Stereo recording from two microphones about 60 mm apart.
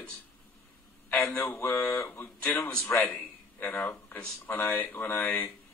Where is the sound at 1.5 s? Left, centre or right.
Left.